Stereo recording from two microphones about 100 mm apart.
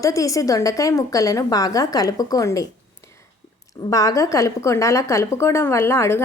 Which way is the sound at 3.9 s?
35° left (ahead or behind).